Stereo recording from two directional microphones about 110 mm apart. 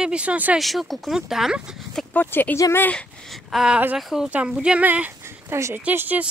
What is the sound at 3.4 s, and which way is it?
Speech, 5° right (ahead or behind).